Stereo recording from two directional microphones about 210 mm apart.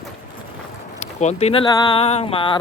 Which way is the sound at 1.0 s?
30° left (ahead or behind).